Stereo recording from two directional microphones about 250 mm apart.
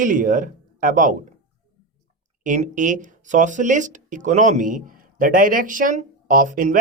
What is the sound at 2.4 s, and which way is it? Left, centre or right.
Speech, right.